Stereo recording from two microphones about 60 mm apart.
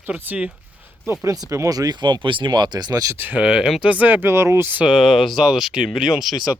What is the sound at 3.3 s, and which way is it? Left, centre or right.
Speech, centre.